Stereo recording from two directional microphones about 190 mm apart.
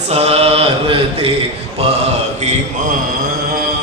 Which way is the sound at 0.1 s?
30° right (ahead or behind).